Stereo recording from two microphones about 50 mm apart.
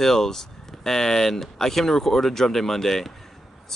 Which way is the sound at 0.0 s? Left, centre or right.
Centre.